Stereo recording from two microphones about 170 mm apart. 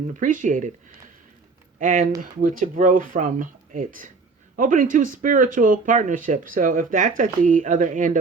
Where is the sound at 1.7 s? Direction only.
50° right (ahead or behind).